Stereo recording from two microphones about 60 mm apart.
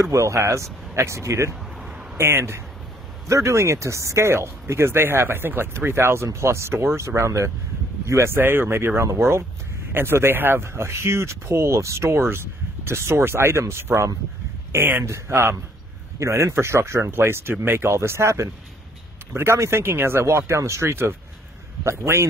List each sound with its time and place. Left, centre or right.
0.0 s speech: right
3.3 s speech: right
8.4 s speech: right
14.7 s speech: right
15.0 s speech: right